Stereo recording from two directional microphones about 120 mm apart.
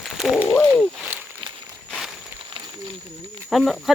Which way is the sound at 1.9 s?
Centre (ahead or behind).